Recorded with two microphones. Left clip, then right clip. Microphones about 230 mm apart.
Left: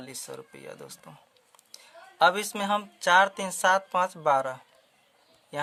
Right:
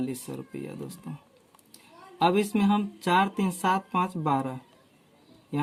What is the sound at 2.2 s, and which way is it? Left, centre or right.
Speech, left.